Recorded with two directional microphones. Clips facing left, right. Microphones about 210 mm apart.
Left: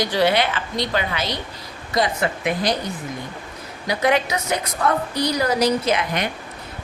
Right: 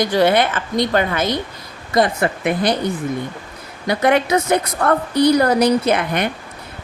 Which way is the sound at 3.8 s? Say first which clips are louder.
Right 4 dB; 55° right (ahead or behind).